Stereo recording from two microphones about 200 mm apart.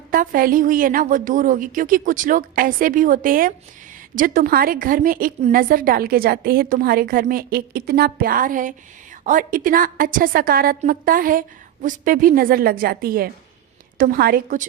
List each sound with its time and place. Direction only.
0.1 s a woman's voice: 45° right (ahead or behind)